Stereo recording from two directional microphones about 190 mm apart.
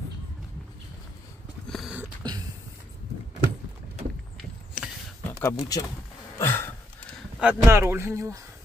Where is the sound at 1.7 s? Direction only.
Centre (ahead or behind).